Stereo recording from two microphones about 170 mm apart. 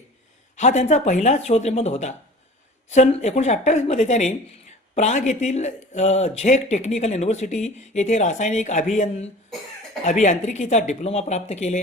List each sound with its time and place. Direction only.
0.5 s speech: 45° left (ahead or behind)
10.0 s speech: 45° left (ahead or behind)